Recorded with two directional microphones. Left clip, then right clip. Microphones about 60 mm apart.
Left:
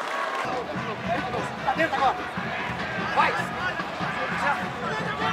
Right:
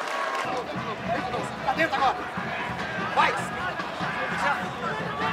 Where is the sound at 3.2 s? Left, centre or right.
Right.